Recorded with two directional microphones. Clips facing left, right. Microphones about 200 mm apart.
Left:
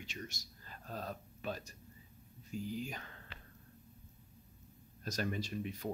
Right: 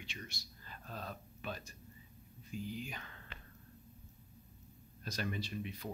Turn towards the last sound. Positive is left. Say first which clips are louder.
# left 3 dB
turn(degrees=45)  # may be behind; listen again after turning